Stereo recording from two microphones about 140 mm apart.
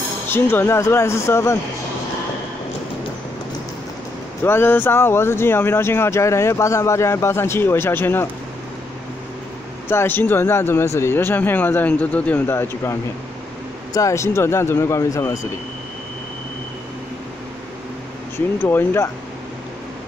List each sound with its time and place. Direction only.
0.3 s speech: 15° left (ahead or behind)
4.4 s speech: 15° left (ahead or behind)
9.8 s speech: 15° left (ahead or behind)
13.9 s speech: 20° left (ahead or behind)
18.6 s speech: 15° left (ahead or behind)